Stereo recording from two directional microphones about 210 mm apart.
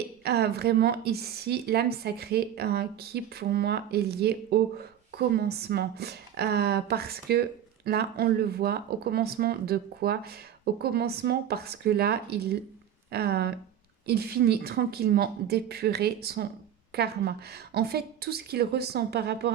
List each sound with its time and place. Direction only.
0.3 s a woman's voice: 50° right (ahead or behind)